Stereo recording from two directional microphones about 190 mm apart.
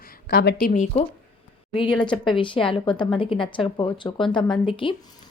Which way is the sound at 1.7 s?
25° left (ahead or behind).